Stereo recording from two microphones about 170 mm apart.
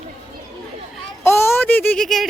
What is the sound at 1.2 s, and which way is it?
Speech, 15° left (ahead or behind).